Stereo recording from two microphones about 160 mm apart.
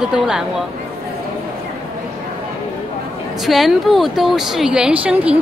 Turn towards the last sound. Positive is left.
turn(degrees=-10)  # may be behind; listen again after turning